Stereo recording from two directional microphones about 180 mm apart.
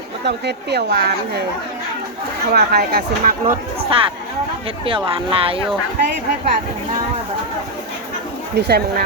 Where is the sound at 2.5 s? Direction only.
60° right (ahead or behind).